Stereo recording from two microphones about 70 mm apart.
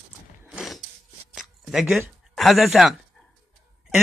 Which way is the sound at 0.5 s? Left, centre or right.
Centre.